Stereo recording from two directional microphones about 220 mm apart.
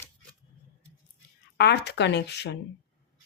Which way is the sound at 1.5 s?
50° left (ahead or behind).